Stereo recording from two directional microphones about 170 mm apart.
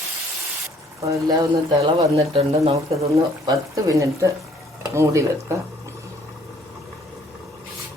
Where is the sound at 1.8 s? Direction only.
35° right (ahead or behind).